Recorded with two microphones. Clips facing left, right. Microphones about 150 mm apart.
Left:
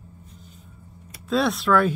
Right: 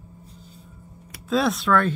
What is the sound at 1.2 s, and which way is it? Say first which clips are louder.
Speech: even; centre (ahead or behind).